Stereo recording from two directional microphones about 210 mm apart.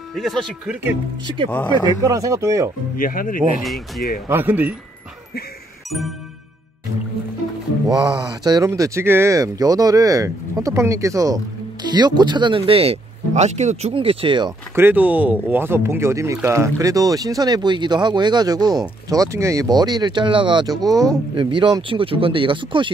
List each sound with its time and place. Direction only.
0.1 s speech: centre (ahead or behind)
1.2 s speech: 25° right (ahead or behind)
3.0 s speech: 40° left (ahead or behind)
3.6 s speech: centre (ahead or behind)
5.9 s music: centre (ahead or behind)
7.9 s speech: 20° right (ahead or behind)
14.8 s speech: 10° right (ahead or behind)